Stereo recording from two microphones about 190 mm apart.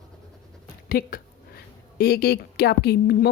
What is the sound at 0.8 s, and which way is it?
A woman's voice, 50° left (ahead or behind).